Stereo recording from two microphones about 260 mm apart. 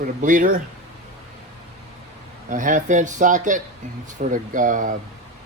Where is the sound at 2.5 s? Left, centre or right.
Right.